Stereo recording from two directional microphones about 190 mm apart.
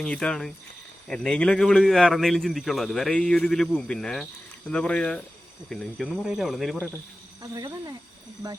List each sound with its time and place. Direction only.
0.0 s a man's voice: 5° left (ahead or behind)
7.5 s speech: 20° right (ahead or behind)